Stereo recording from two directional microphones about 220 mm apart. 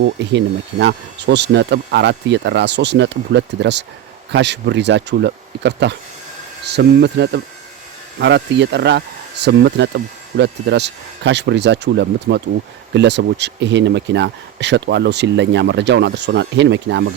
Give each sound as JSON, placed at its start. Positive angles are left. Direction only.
{"t": 0.0, "sound": "speech", "side_deg": -55}